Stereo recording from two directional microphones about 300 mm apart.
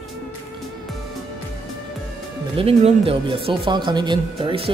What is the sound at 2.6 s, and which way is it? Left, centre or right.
Speech, centre.